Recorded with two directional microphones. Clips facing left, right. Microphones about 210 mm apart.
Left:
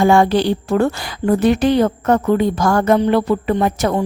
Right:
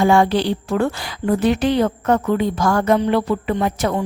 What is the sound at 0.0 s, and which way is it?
A woman's voice, 45° left (ahead or behind).